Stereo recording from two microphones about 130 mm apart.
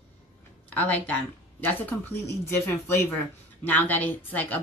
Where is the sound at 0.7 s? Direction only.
10° left (ahead or behind).